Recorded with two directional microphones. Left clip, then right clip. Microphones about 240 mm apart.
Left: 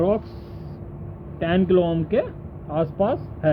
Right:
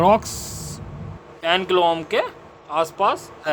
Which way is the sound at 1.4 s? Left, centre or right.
Right.